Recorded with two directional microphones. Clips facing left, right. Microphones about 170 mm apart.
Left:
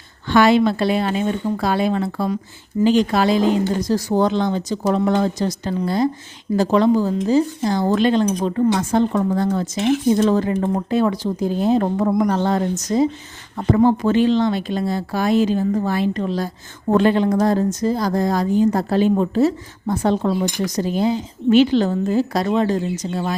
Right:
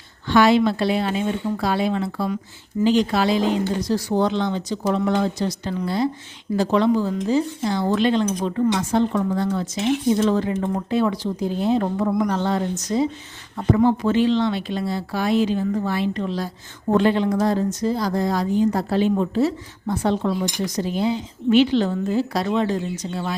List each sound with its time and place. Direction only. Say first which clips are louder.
0.3 s a woman's voice: left 2 dB; 55° left (ahead or behind)